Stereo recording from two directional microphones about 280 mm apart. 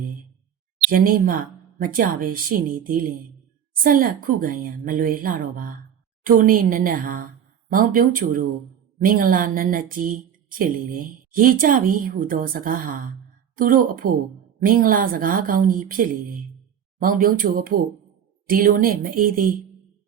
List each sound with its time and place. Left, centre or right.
0.9 s a woman's voice: right